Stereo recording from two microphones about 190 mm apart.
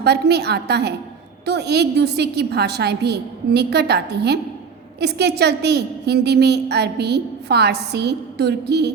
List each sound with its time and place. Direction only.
0.0 s a woman's voice: 60° right (ahead or behind)